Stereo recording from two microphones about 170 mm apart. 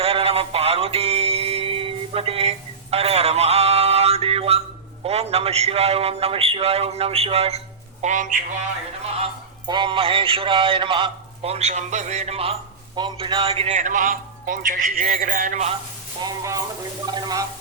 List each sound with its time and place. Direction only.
0.0 s music: 35° right (ahead or behind)
5.0 s a man's voice: 35° right (ahead or behind)
8.0 s a man's voice: 50° right (ahead or behind)
9.6 s a man's voice: 30° right (ahead or behind); by 15.7 s 50° right (ahead or behind)
16.2 s speech: 20° right (ahead or behind)